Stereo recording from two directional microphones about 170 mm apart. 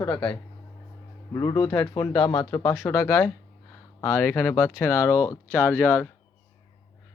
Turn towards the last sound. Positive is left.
turn(degrees=15)  # may be behind; listen again after turning